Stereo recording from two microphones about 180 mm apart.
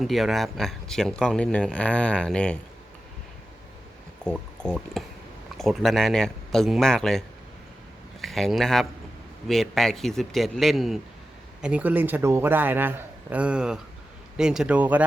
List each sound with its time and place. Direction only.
0.0 s speech: centre (ahead or behind)
4.2 s speech: 5° left (ahead or behind)